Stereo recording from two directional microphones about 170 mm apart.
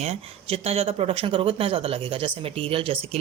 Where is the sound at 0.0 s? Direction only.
35° right (ahead or behind).